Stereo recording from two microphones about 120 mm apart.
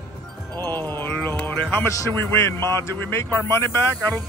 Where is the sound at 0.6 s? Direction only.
15° left (ahead or behind).